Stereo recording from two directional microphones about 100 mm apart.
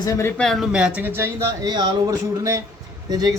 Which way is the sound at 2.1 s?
35° right (ahead or behind).